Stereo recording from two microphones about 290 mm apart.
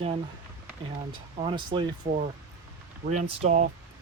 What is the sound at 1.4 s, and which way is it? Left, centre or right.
Speech, centre.